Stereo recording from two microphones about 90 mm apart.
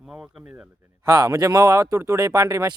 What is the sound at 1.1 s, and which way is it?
Speech, 40° right (ahead or behind).